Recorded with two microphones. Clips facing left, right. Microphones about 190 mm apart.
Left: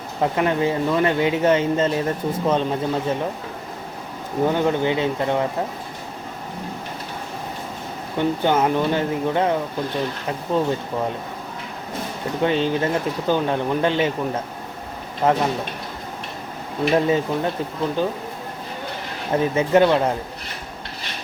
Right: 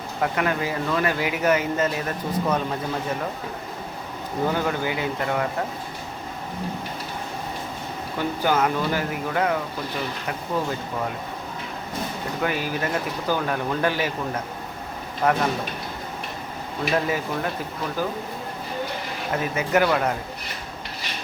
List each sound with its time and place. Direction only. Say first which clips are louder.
0.2 s speech: left 4 dB; 25° left (ahead or behind)
4.4 s speech: left 5 dB; 20° left (ahead or behind)
8.2 s speech: left 3 dB; 25° left (ahead or behind)
12.4 s speech: left 6 dB; 25° left (ahead or behind)
15.2 s speech: left 3 dB; 25° left (ahead or behind)
16.9 s speech: left 5 dB; 25° left (ahead or behind)
19.4 s speech: left 6 dB; 30° left (ahead or behind)